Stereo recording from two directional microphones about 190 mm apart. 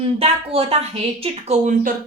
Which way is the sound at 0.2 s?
30° right (ahead or behind).